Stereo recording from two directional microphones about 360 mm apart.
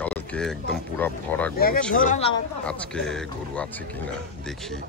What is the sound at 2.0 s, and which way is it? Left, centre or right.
Speech, centre.